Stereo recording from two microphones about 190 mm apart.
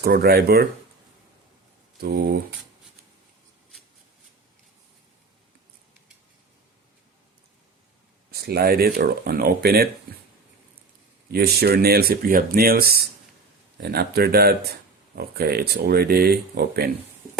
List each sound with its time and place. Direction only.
0.0 s speech: 55° right (ahead or behind)
2.0 s speech: 55° right (ahead or behind)
8.3 s speech: 55° right (ahead or behind)
11.3 s speech: 55° right (ahead or behind)